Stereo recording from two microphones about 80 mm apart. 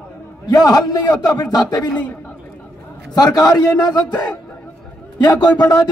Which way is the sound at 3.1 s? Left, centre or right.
Left.